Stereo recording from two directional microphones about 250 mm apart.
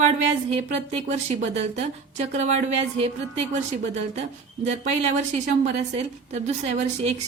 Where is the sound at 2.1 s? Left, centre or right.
Right.